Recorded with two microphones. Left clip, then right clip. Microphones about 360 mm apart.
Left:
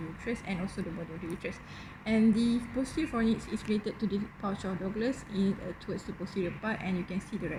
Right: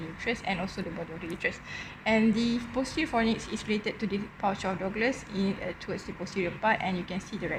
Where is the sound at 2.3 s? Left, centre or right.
Centre.